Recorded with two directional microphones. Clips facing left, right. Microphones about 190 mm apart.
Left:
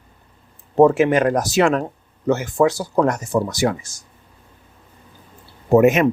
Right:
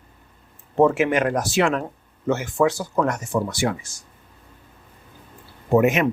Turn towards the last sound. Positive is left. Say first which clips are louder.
# left 4 dB
turn(degrees=45)  # may be behind; listen again after turning